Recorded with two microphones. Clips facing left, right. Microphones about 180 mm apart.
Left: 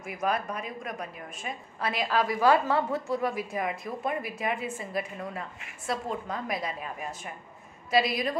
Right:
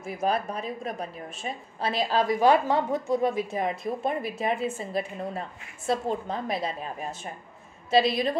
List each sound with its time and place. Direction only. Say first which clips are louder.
0.0 s a woman's voice: right 3 dB; 30° right (ahead or behind)